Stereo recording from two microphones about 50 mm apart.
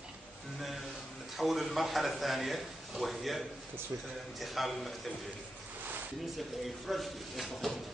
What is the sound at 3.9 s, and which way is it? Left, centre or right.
Speech, right.